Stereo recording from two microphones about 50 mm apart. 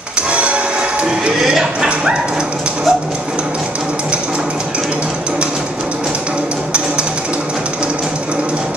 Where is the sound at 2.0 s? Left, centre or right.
Centre.